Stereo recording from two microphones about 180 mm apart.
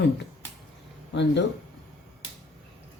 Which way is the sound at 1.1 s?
80° left.